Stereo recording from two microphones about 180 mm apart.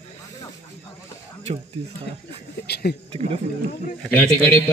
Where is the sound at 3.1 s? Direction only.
30° right (ahead or behind).